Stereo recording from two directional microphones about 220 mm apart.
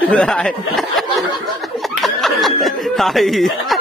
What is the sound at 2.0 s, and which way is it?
Snicker, centre (ahead or behind).